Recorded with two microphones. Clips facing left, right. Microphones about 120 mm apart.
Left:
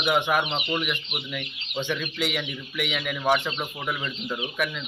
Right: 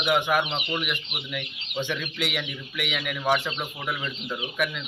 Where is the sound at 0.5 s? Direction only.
10° left (ahead or behind).